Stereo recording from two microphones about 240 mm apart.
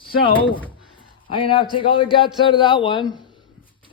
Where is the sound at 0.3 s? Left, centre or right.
Left.